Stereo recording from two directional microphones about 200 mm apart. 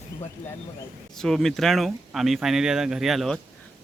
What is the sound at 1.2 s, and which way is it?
Speech, centre (ahead or behind).